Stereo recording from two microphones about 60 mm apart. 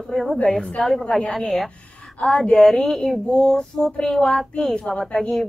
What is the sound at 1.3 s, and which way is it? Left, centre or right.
Speech, centre.